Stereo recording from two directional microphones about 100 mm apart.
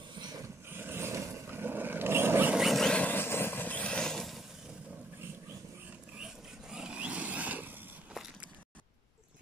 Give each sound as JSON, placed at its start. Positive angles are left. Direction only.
{"t": 0.1, "sound": "vehicle", "side_deg": -45}
{"t": 0.4, "sound": "vehicle", "side_deg": -20}
{"t": 2.5, "sound": "vehicle", "side_deg": 0}
{"t": 3.0, "sound": "vehicle", "side_deg": 20}
{"t": 6.7, "sound": "a sound", "side_deg": -10}